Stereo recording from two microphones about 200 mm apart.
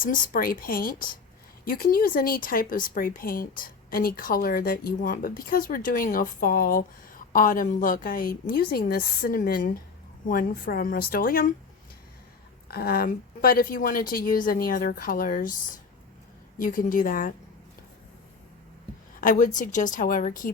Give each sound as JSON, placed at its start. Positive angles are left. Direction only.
{"t": 0.0, "sound": "speech", "side_deg": 45}
{"t": 12.6, "sound": "speech", "side_deg": 50}
{"t": 19.2, "sound": "a woman's voice", "side_deg": 40}